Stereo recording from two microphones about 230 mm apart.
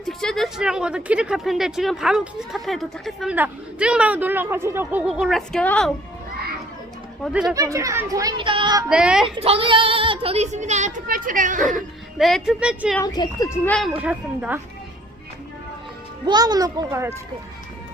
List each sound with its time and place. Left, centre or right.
0.0 s speech: centre
7.5 s speech: centre
8.9 s speech: centre
9.3 s speech: right
12.1 s speech: centre
13.0 s speech: centre
13.7 s speech: centre
16.2 s speech: centre